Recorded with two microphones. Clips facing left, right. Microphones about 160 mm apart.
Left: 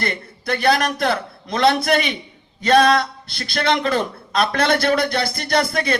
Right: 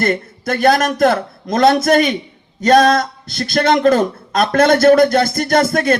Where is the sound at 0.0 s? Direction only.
45° right (ahead or behind).